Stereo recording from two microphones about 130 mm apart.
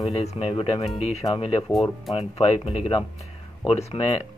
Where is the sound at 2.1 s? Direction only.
50° left (ahead or behind).